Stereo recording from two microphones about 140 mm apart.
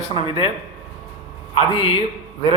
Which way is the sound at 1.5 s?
40° left (ahead or behind).